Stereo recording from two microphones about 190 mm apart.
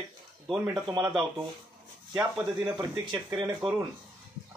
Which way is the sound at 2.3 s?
15° right (ahead or behind).